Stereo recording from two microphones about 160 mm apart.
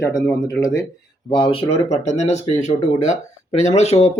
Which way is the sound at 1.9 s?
45° left (ahead or behind).